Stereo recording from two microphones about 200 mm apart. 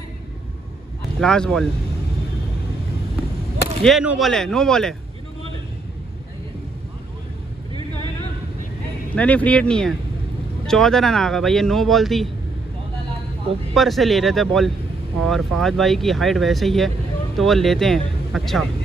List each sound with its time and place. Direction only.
1.2 s speech: 5° left (ahead or behind)
3.8 s speech: centre (ahead or behind)
7.7 s a sound: 20° right (ahead or behind)
9.1 s speech: 5° left (ahead or behind)
13.7 s speech: centre (ahead or behind)